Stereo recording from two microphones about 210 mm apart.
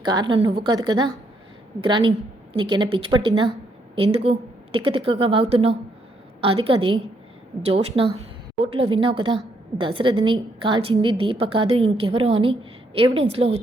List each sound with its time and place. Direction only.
0.0 s a woman's voice: 20° right (ahead or behind)